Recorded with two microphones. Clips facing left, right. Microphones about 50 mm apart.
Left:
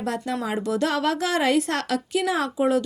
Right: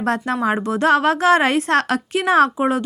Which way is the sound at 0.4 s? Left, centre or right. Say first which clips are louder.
Right 8 dB; right.